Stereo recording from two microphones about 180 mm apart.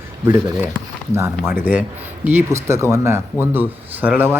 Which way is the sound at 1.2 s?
15° right (ahead or behind).